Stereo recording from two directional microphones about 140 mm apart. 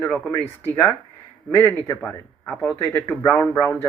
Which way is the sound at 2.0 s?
5° left (ahead or behind).